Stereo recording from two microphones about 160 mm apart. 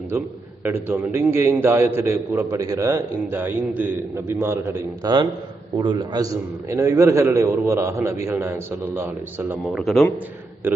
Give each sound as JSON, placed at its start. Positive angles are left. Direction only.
{"t": 0.6, "sound": "a man's voice", "side_deg": -15}
{"t": 9.7, "sound": "a man's voice", "side_deg": 0}
{"t": 10.6, "sound": "a man's voice", "side_deg": -15}